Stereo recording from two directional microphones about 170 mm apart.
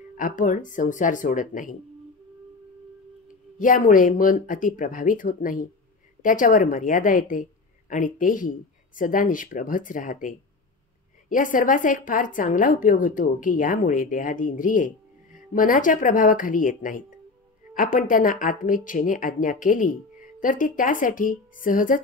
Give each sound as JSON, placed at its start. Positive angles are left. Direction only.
{"t": 0.2, "sound": "speech", "side_deg": 50}
{"t": 3.5, "sound": "speech", "side_deg": 50}